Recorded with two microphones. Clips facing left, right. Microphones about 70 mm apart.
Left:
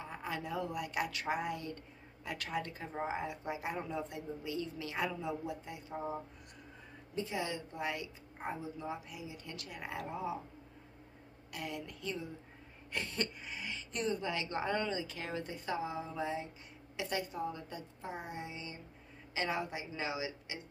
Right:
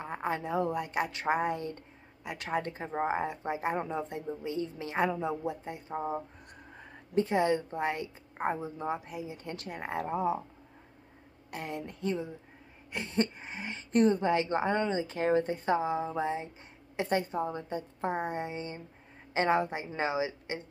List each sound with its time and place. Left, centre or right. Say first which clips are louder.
0.0 s speech: right 7 dB; right
2.2 s speech: right 3 dB; right
2.5 s speech: right 8 dB; right
7.2 s speech: right 11 dB; right
11.5 s speech: right 4 dB; right